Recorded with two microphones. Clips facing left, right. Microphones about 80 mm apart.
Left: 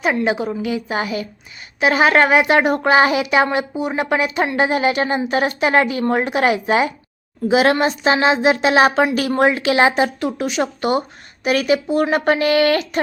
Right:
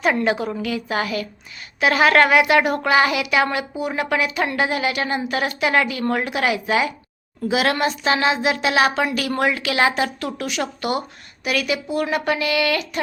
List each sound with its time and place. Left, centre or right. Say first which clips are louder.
0.0 s a woman's voice: left 1 dB; centre; by 13.0 s left